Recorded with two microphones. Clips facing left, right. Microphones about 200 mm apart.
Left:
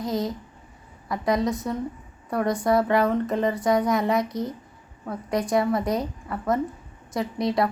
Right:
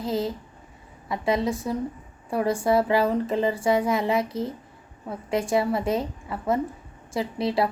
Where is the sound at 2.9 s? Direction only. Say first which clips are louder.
Even; 30° right (ahead or behind).